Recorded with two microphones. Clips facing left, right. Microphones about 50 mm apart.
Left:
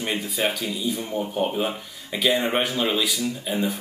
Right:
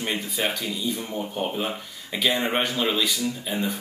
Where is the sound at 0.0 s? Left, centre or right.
Centre.